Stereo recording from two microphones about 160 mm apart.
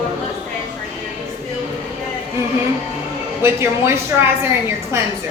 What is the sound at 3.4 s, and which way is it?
A woman's voice, 15° right (ahead or behind).